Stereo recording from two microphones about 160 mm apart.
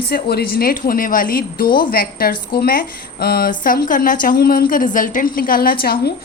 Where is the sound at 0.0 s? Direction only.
80° left; by 5.7 s 65° left (ahead or behind).